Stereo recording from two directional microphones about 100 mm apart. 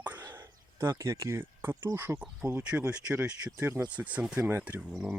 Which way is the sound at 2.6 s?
10° right (ahead or behind).